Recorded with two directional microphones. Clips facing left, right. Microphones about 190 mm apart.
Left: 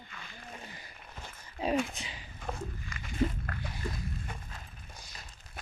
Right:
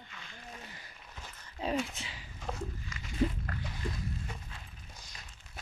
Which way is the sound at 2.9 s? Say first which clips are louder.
Left 1 dB; 55° left (ahead or behind).